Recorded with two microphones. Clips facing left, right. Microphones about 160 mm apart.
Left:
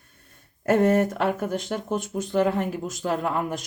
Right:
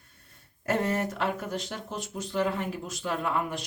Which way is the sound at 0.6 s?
50° left (ahead or behind).